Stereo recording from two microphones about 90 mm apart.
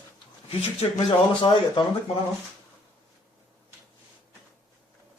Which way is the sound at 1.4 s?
60° left (ahead or behind).